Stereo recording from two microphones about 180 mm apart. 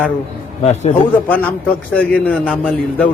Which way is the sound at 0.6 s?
35° left (ahead or behind).